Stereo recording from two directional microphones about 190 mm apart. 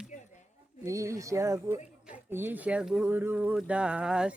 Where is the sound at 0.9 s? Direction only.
15° right (ahead or behind).